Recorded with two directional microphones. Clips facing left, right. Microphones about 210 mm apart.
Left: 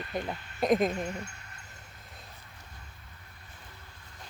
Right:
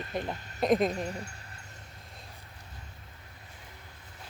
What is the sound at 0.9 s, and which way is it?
Speech, 35° right (ahead or behind).